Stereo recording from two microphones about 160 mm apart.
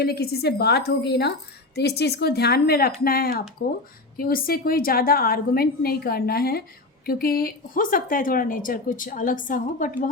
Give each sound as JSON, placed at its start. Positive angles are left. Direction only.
{"t": 0.0, "sound": "a woman's voice", "side_deg": 90}